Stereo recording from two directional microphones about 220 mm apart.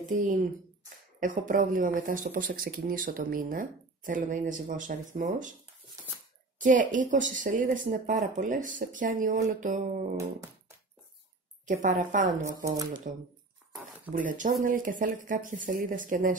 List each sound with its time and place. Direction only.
1.2 s speech: 35° right (ahead or behind)
6.6 s speech: 35° right (ahead or behind)
11.6 s speech: 35° right (ahead or behind)
12.4 s speech: 15° right (ahead or behind)
14.1 s speech: 35° right (ahead or behind)